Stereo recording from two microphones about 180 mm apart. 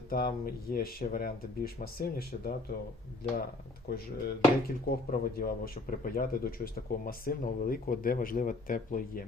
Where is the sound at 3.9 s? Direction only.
60° left (ahead or behind).